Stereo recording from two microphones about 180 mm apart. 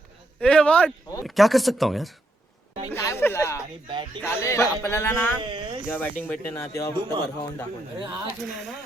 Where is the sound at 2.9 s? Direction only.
10° left (ahead or behind).